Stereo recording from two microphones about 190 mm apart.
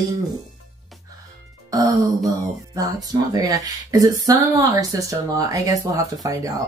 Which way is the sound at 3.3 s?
20° right (ahead or behind).